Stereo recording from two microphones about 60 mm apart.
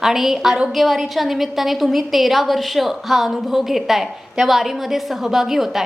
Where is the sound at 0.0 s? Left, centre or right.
Centre.